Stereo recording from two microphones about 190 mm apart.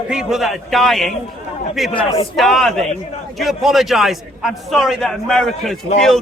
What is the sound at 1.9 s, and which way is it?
Speech, 25° left (ahead or behind).